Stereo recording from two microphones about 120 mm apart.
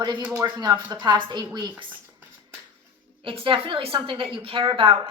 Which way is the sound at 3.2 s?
50° right (ahead or behind).